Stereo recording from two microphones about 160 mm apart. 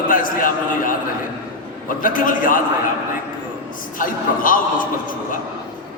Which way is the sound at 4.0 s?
60° left (ahead or behind).